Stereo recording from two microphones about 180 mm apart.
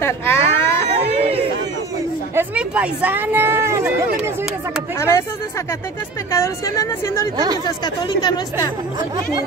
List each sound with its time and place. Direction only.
0.0 s baby cry: 15° left (ahead or behind)
1.0 s a sound: 35° right (ahead or behind)
2.3 s speech: 5° right (ahead or behind)
4.9 s a woman's voice: 15° left (ahead or behind)
6.3 s a woman's voice: 15° left (ahead or behind)